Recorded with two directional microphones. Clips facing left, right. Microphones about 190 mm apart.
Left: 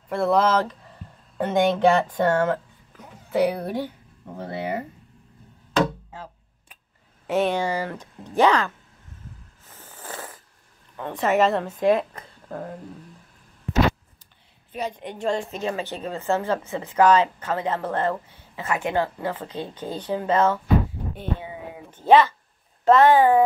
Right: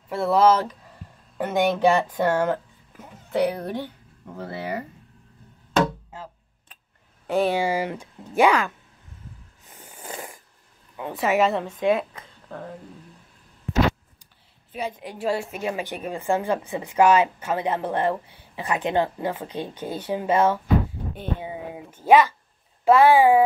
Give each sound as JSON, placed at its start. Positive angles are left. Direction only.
{"t": 0.1, "sound": "a woman's voice", "side_deg": -5}
{"t": 3.3, "sound": "speech", "side_deg": 10}
{"t": 4.4, "sound": "speech", "side_deg": 20}
{"t": 7.2, "sound": "a woman's voice", "side_deg": 0}
{"t": 9.7, "sound": "a sound", "side_deg": -15}
{"t": 11.0, "sound": "a woman's voice", "side_deg": -5}
{"t": 14.7, "sound": "a woman's voice", "side_deg": -5}
{"t": 21.9, "sound": "a woman's voice", "side_deg": -10}